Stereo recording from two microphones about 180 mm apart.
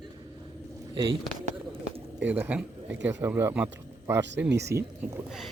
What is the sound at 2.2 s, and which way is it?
Speech, 10° right (ahead or behind).